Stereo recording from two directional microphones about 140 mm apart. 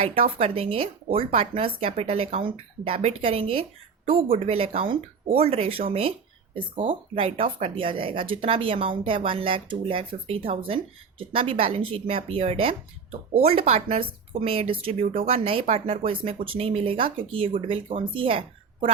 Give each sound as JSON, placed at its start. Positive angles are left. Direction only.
{"t": 0.0, "sound": "speech", "side_deg": -45}